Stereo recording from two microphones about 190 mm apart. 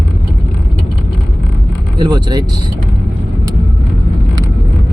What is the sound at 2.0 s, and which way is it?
Speech, 20° right (ahead or behind).